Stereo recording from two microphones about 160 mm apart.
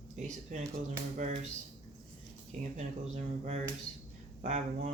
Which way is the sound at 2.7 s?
45° right (ahead or behind).